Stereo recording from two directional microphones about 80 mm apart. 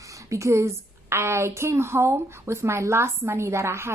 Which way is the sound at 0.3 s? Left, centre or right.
Right.